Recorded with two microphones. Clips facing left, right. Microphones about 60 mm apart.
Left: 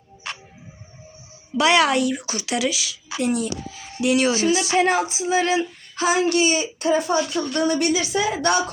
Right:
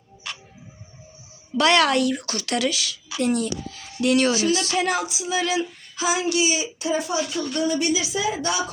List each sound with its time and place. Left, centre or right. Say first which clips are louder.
0.3 s music: left 3 dB; left
1.5 s a woman's voice: left 1 dB; centre
4.4 s a woman's voice: left 3 dB; centre
4.8 s female singing: left 4 dB; left
6.0 s speech: left 3 dB; left
7.3 s female singing: left 3 dB; left
7.6 s speech: left 2 dB; left